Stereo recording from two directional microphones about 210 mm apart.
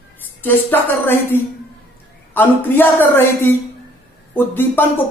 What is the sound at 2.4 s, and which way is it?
Speech, 10° left (ahead or behind).